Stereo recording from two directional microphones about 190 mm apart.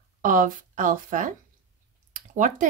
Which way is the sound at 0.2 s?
45° right (ahead or behind).